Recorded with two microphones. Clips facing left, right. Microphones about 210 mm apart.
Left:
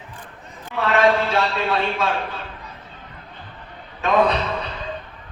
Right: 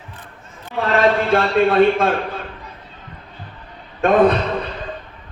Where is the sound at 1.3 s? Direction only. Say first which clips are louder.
Right 6 dB; 55° right (ahead or behind).